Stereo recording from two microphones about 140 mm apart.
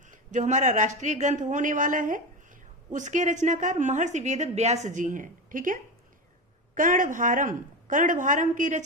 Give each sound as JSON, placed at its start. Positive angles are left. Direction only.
{"t": 0.1, "sound": "a woman's voice", "side_deg": -60}